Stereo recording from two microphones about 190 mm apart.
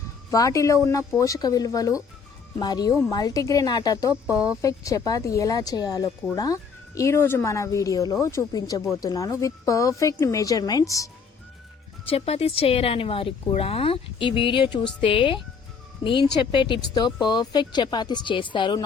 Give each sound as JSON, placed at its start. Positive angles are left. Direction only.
{"t": 0.3, "sound": "speech", "side_deg": 15}
{"t": 12.0, "sound": "speech", "side_deg": 30}